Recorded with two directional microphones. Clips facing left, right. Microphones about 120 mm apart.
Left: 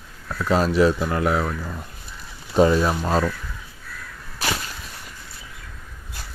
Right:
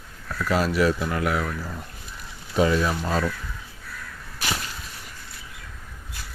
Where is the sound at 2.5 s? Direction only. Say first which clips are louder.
Left 4 dB; 30° left (ahead or behind).